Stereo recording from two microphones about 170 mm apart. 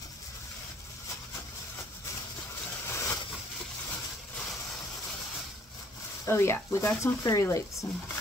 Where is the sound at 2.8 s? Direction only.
15° left (ahead or behind).